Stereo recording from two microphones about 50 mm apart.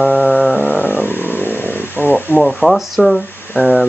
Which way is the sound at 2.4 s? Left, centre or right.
Centre.